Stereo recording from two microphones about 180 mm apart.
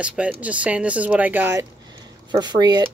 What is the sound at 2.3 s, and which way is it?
Speech, 25° right (ahead or behind).